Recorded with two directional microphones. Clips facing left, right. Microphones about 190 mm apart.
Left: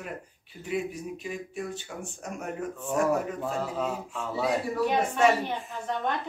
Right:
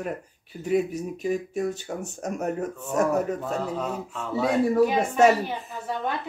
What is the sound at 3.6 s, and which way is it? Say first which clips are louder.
Speech: right 2 dB; 5° left (ahead or behind).